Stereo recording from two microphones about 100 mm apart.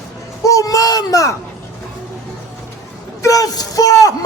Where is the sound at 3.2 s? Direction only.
35° left (ahead or behind).